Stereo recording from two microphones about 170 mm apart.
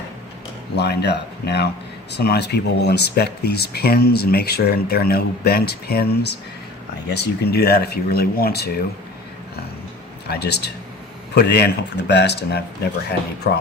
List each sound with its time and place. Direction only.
0.8 s speech: 75° left (ahead or behind)
10.2 s speech: 75° left (ahead or behind)